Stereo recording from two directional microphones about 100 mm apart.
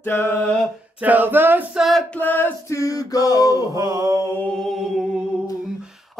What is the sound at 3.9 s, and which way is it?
Mantra, 35° right (ahead or behind).